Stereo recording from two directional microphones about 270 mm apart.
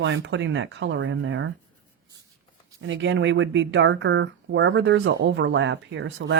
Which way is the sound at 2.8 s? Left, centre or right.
Right.